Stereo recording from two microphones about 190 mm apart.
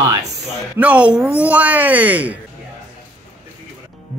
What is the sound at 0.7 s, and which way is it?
Speech, 5° right (ahead or behind).